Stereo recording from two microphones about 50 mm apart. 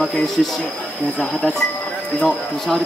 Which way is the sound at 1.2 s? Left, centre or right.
Centre.